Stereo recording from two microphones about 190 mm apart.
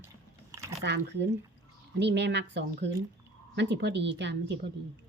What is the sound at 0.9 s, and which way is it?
Speech, 65° right (ahead or behind).